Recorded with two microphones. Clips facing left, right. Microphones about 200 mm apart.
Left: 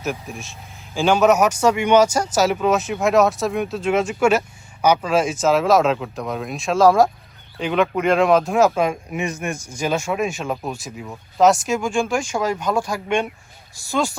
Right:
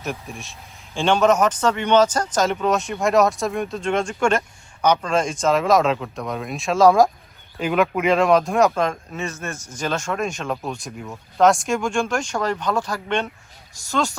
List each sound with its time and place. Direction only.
0.0 s speech: centre (ahead or behind)